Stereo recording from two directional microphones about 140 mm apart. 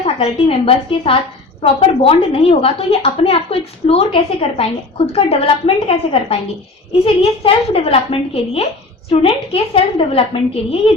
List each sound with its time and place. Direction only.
0.0 s a woman's voice: 45° left (ahead or behind)